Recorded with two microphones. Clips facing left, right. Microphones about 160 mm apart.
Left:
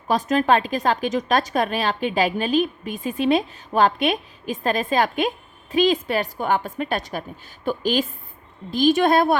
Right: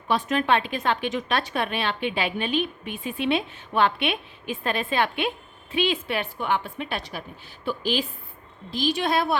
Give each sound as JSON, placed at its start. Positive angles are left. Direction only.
{"t": 0.1, "sound": "a woman's voice", "side_deg": 40}